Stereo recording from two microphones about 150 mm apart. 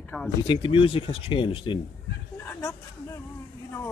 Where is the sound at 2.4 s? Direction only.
15° left (ahead or behind).